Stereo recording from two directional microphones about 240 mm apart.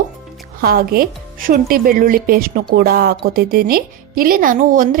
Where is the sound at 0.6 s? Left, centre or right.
Right.